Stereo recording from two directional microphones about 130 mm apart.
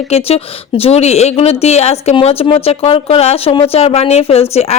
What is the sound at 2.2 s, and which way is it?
Speech, 45° left (ahead or behind).